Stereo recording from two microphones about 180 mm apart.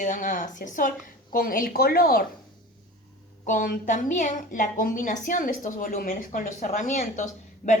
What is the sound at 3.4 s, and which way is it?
A woman's voice, 50° left (ahead or behind).